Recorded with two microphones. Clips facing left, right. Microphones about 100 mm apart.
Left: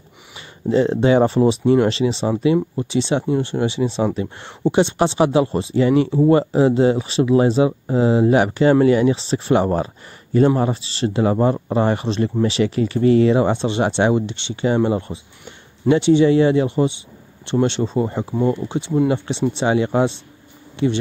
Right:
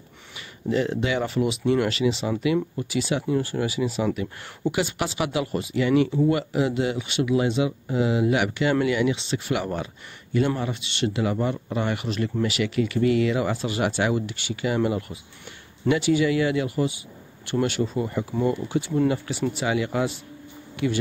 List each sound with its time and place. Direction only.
0.7 s speech: 30° left (ahead or behind)